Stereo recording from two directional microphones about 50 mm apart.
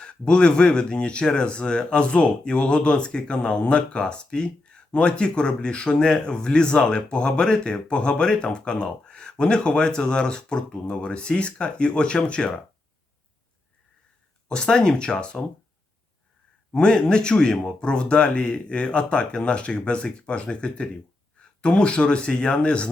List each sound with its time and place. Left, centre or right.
0.0 s speech: centre
14.4 s speech: centre
16.7 s speech: centre